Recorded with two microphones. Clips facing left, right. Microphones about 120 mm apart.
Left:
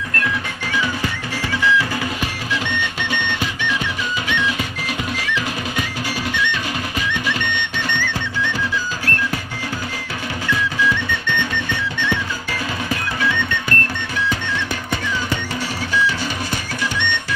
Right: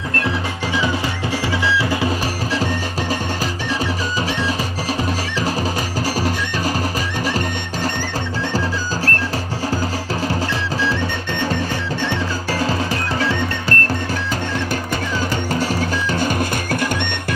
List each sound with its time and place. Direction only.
1.6 s music: 25° right (ahead or behind)
2.5 s music: 35° right (ahead or behind)
10.5 s music: 35° right (ahead or behind)
15.9 s music: 45° right (ahead or behind)